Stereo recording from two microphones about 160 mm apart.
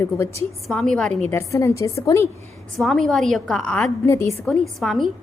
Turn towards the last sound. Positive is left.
turn(degrees=0)  # may be behind; listen again after turning